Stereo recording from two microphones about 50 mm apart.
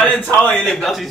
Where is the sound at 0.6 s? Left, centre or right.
Centre.